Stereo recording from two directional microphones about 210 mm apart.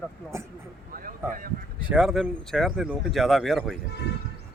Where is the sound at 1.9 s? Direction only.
Centre (ahead or behind).